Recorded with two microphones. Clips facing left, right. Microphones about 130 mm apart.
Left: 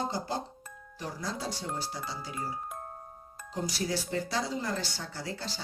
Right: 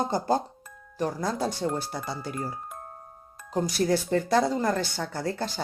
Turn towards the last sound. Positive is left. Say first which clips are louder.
# right 8 dB
turn(degrees=-55)  # may be behind; listen again after turning